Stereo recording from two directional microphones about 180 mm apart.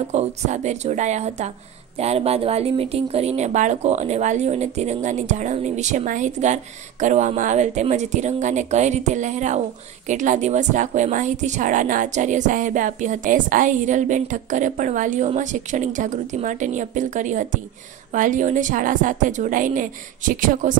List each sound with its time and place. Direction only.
0.1 s a woman's voice: 40° right (ahead or behind)